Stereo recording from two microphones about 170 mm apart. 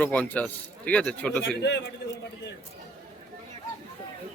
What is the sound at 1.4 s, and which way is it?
Speech, 90° left.